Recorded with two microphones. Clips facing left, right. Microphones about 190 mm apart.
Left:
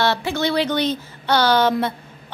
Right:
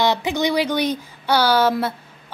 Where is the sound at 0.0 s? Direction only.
15° right (ahead or behind).